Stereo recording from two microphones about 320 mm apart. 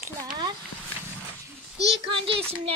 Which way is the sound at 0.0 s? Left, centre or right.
Centre.